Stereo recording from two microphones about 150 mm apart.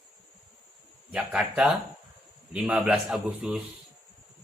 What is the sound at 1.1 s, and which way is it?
A man's voice, 5° right (ahead or behind).